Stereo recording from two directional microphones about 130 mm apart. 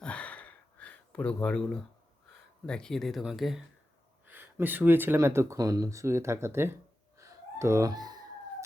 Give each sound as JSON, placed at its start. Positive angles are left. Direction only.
{"t": 0.0, "sound": "gasp", "side_deg": 10}
{"t": 2.6, "sound": "speech", "side_deg": 5}
{"t": 4.3, "sound": "speech", "side_deg": -15}
{"t": 7.2, "sound": "a sound", "side_deg": -25}